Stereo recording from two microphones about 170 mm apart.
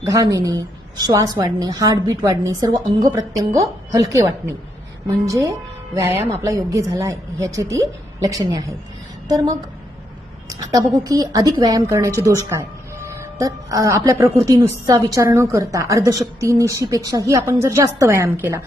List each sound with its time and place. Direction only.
0.1 s a woman's voice: 20° right (ahead or behind)
10.5 s a woman's voice: 20° right (ahead or behind)